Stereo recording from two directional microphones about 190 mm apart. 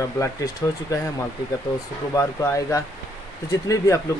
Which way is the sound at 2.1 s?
15° left (ahead or behind).